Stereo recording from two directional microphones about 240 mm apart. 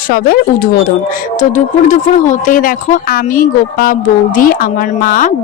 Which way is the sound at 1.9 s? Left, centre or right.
Left.